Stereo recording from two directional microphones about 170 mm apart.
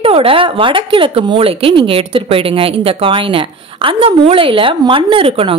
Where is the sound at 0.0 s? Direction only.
35° right (ahead or behind).